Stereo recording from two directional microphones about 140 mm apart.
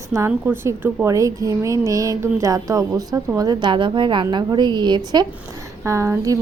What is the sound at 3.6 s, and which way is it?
A woman's voice, 35° right (ahead or behind).